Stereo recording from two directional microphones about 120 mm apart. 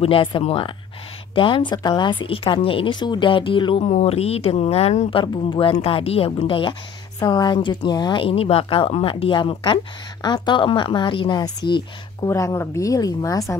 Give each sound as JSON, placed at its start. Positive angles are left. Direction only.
{"t": 0.0, "sound": "speech", "side_deg": 45}
{"t": 3.8, "sound": "speech", "side_deg": 65}
{"t": 5.2, "sound": "speech", "side_deg": 50}
{"t": 7.2, "sound": "a woman's voice", "side_deg": 35}
{"t": 12.3, "sound": "a woman's voice", "side_deg": 25}